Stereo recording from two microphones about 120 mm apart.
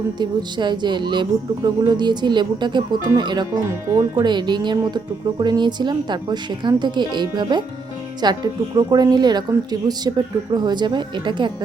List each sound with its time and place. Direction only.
0.2 s speech: 40° right (ahead or behind)